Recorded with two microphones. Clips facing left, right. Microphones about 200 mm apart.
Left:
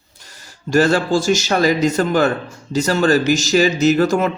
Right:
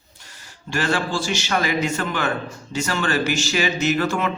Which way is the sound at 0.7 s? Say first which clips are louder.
Left 9 dB; 40° left (ahead or behind).